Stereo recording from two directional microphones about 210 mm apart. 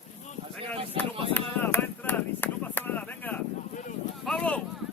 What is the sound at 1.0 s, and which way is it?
Speech, 25° right (ahead or behind).